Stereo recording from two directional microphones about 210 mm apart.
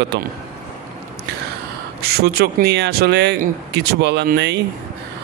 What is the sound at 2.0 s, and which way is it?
A man's voice, 50° right (ahead or behind).